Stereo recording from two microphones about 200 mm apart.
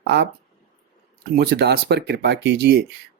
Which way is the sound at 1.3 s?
55° right (ahead or behind).